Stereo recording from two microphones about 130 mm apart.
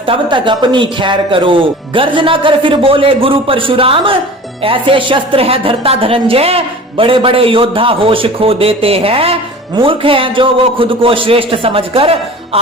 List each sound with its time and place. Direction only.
0.1 s a woman's voice: 40° right (ahead or behind)